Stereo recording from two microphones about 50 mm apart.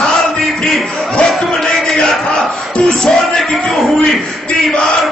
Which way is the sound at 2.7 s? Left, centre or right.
Centre.